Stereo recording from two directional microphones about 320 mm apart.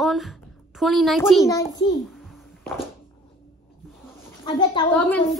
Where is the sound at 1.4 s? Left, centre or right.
Centre.